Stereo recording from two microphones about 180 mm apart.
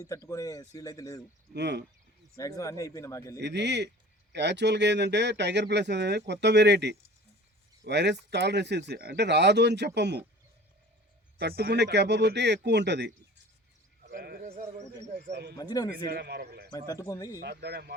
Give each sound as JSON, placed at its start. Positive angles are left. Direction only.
{"t": 0.3, "sound": "speech", "side_deg": 20}
{"t": 1.5, "sound": "speech", "side_deg": -70}
{"t": 2.3, "sound": "a man's voice", "side_deg": 20}
{"t": 3.4, "sound": "speech", "side_deg": -70}
{"t": 11.3, "sound": "speech", "side_deg": -60}
{"t": 14.0, "sound": "a sound", "side_deg": -60}
{"t": 14.5, "sound": "a sound", "side_deg": -40}
{"t": 15.3, "sound": "speech", "side_deg": -65}
{"t": 15.5, "sound": "speech", "side_deg": 20}
{"t": 16.0, "sound": "a man's voice", "side_deg": -60}
{"t": 16.7, "sound": "speech", "side_deg": 20}
{"t": 17.4, "sound": "speech", "side_deg": -65}